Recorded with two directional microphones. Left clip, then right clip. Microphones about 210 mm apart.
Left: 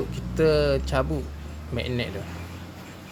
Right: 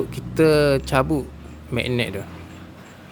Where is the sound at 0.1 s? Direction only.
30° right (ahead or behind).